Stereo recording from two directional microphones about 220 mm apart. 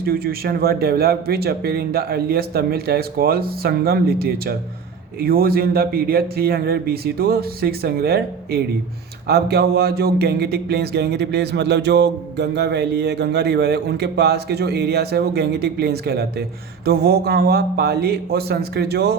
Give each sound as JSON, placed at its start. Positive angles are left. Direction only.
{"t": 0.0, "sound": "speech", "side_deg": -45}